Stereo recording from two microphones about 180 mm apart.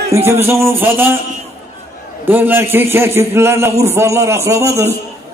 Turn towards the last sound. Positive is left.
turn(degrees=-15)  # may be behind; listen again after turning